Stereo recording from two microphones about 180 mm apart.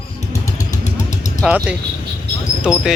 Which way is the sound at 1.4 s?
5° right (ahead or behind).